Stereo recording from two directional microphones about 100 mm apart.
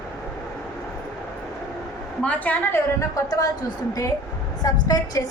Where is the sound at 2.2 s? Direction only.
15° left (ahead or behind).